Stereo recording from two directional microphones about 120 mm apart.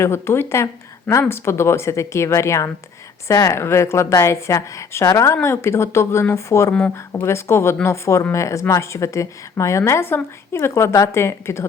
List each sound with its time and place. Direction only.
0.0 s speech: 20° left (ahead or behind)